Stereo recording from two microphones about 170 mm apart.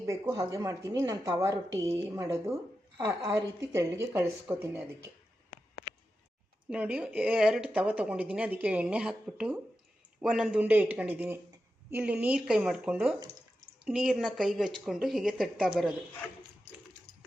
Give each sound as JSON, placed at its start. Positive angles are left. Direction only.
{"t": 0.0, "sound": "a woman's voice", "side_deg": -20}
{"t": 6.7, "sound": "a woman's voice", "side_deg": -5}